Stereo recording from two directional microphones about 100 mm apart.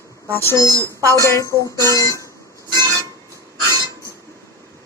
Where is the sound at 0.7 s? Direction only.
35° right (ahead or behind).